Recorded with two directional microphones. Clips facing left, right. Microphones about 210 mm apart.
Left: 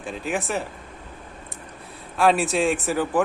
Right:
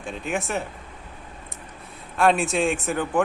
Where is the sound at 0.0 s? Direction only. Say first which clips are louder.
Left 1 dB; centre (ahead or behind).